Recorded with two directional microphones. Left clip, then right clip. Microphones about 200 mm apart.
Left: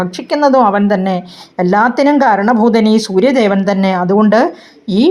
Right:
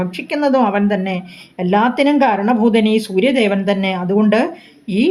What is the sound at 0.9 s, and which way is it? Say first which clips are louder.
Speech: left 6 dB; 90° left.